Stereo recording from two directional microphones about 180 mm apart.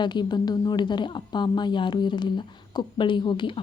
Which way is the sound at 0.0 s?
25° left (ahead or behind).